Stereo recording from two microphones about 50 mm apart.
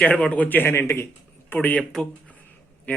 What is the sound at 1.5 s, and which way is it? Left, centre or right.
Speech, left.